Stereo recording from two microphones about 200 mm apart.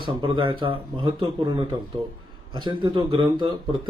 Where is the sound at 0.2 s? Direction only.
25° right (ahead or behind).